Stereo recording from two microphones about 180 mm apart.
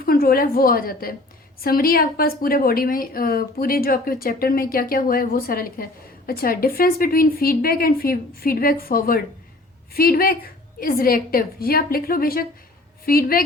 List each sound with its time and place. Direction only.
0.0 s a woman's voice: 55° left (ahead or behind)